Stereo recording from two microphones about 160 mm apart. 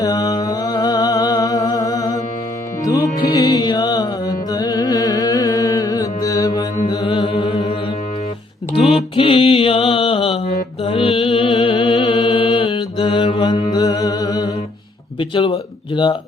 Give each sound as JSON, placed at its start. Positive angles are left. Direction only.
{"t": 0.0, "sound": "a sound", "side_deg": 20}
{"t": 2.8, "sound": "music", "side_deg": 25}
{"t": 9.1, "sound": "mantra", "side_deg": 35}
{"t": 15.2, "sound": "speech", "side_deg": 35}